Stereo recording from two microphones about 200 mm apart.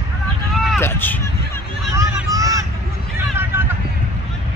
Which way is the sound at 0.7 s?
10° left (ahead or behind).